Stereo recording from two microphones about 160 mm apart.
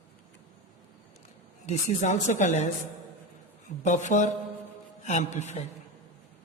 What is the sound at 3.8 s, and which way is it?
A man's voice, 50° left (ahead or behind).